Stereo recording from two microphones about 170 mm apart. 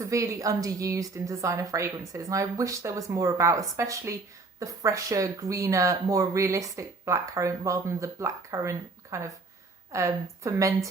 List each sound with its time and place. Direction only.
0.0 s a woman's voice: 20° right (ahead or behind)